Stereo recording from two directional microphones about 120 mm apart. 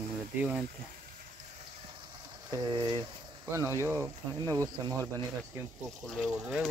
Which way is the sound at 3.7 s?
20° right (ahead or behind).